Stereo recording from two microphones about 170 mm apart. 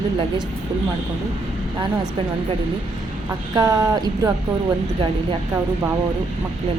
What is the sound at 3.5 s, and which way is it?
Speech, 20° right (ahead or behind).